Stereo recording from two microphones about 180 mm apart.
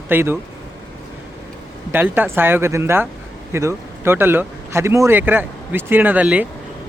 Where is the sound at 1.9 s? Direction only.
10° right (ahead or behind).